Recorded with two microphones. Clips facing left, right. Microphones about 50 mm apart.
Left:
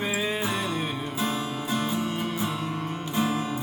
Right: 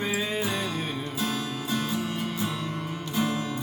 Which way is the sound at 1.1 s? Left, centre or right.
Left.